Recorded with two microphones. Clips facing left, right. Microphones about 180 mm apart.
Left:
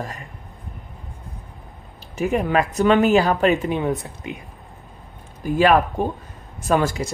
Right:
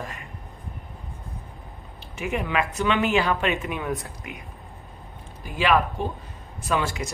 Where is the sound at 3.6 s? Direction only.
30° left (ahead or behind).